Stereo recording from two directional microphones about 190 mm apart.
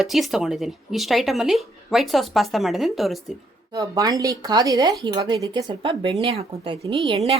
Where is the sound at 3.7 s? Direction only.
20° right (ahead or behind).